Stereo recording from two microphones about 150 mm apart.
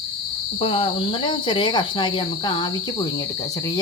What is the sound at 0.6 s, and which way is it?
Speech, 35° left (ahead or behind).